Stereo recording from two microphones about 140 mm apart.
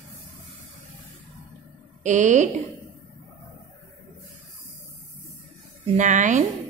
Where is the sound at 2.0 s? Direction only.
60° right (ahead or behind).